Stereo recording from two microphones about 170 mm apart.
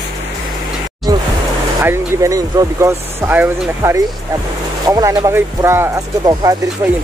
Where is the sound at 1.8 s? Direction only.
15° right (ahead or behind).